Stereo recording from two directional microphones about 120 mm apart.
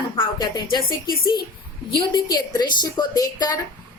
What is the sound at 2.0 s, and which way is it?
A woman's voice, 40° left (ahead or behind).